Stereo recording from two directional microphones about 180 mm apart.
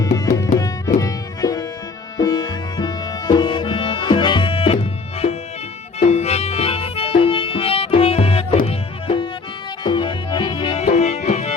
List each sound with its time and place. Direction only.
0.0 s music: 20° left (ahead or behind)
6.0 s music: 35° left (ahead or behind)